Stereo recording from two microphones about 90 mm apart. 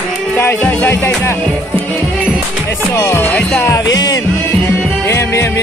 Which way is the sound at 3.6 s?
40° left (ahead or behind).